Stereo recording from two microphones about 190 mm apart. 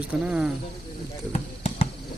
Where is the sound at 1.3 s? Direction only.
30° left (ahead or behind).